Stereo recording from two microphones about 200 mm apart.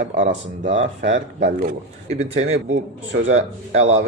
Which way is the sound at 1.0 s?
65° right (ahead or behind).